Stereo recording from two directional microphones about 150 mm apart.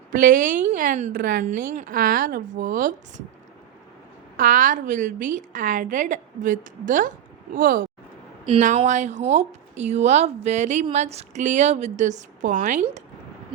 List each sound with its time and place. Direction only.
0.1 s a woman's voice: 65° right (ahead or behind)
4.4 s a woman's voice: 65° right (ahead or behind)
8.6 s speech: 55° right (ahead or behind)